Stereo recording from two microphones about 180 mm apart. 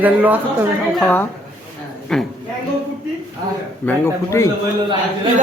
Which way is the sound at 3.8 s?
15° left (ahead or behind).